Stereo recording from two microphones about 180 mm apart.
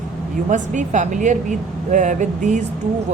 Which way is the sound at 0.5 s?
45° right (ahead or behind).